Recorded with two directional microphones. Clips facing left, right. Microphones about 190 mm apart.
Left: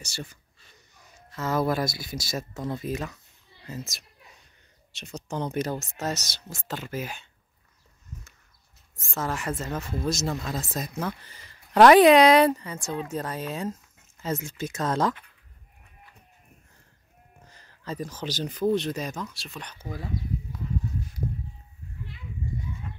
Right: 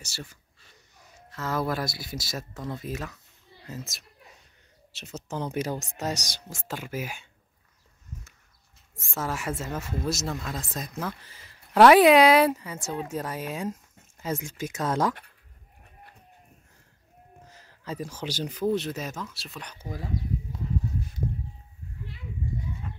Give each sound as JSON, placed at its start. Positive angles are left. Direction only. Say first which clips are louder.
{"t": 0.0, "sound": "speech", "louder": "left 3 dB", "side_deg": -5}
{"t": 9.1, "sound": "speech", "louder": "left 1 dB", "side_deg": -10}
{"t": 17.5, "sound": "speech", "louder": "left 1 dB", "side_deg": -5}